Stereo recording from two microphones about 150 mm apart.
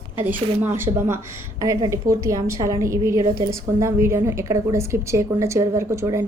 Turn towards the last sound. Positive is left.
turn(degrees=-20)  # may be behind; listen again after turning